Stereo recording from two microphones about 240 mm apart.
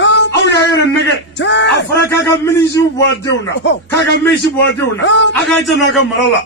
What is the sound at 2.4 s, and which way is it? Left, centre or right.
Speech, centre.